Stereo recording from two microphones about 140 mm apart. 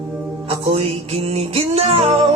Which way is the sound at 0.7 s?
45° right (ahead or behind).